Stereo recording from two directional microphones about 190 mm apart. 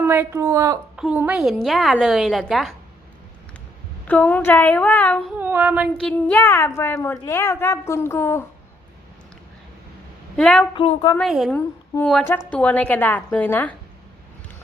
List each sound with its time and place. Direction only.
0.0 s a woman's voice: 10° right (ahead or behind)
0.9 s a woman's voice: 5° right (ahead or behind)
4.0 s a woman's voice: 10° left (ahead or behind)
5.4 s female singing: 10° right (ahead or behind)
6.0 s a woman's voice: 5° left (ahead or behind)
10.3 s a woman's voice: 5° left (ahead or behind)
10.8 s a woman's voice: 25° left (ahead or behind)
11.2 s a woman's voice: centre (ahead or behind)